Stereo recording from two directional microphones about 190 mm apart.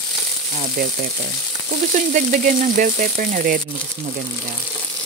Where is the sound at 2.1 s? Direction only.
45° right (ahead or behind).